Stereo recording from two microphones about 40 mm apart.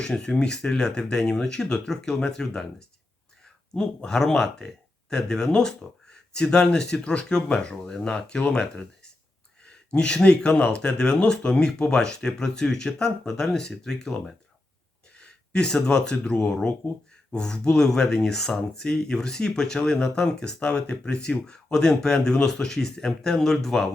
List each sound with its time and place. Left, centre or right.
0.0 s speech: centre
3.8 s speech: centre
9.6 s speech: left
16.2 s speech: left
17.3 s speech: centre